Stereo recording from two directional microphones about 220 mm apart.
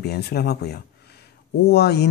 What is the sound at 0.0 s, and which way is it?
Speech, 45° left (ahead or behind).